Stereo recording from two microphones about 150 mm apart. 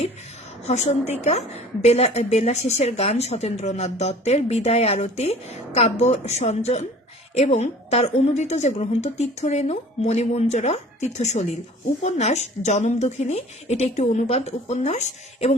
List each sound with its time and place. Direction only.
0.6 s a woman's voice: 45° left (ahead or behind)